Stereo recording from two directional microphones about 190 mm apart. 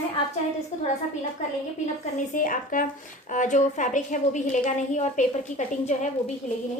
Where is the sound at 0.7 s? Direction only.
40° left (ahead or behind).